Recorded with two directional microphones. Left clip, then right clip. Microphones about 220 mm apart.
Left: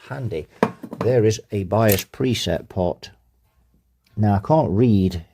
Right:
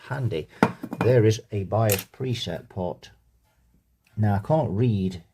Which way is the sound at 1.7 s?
45° left (ahead or behind).